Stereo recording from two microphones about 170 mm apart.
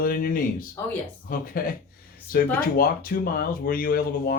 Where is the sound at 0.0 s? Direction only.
55° left (ahead or behind).